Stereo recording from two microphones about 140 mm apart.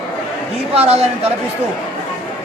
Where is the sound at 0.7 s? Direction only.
45° right (ahead or behind).